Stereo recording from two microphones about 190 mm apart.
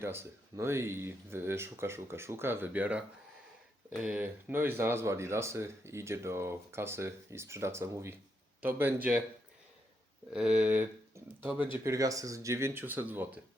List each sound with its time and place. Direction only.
0.0 s speech: 10° right (ahead or behind)
10.3 s speech: 5° right (ahead or behind)